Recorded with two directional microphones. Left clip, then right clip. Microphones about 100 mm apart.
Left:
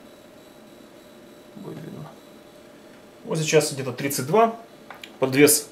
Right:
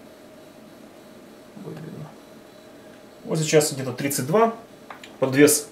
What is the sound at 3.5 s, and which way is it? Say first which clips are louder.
Speech: right 1 dB; 10° left (ahead or behind).